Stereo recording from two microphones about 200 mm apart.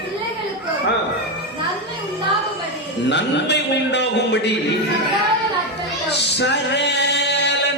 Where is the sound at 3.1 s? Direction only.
60° left (ahead or behind).